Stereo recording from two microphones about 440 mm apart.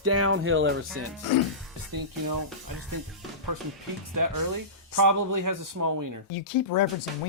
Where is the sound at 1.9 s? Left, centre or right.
Right.